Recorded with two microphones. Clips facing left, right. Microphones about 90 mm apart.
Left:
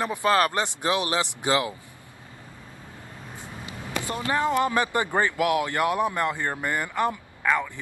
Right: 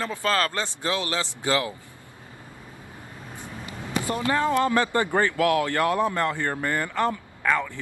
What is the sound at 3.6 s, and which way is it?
Speech, 20° left (ahead or behind).